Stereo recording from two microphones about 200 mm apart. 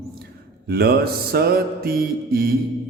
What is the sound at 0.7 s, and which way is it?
Mantra, 50° right (ahead or behind).